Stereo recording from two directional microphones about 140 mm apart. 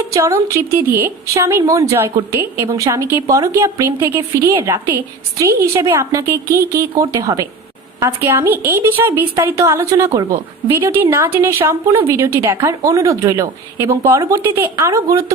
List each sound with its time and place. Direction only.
0.0 s a woman's voice: 20° right (ahead or behind)